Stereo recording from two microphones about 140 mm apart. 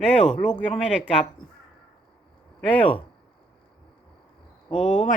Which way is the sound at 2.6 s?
10° left (ahead or behind).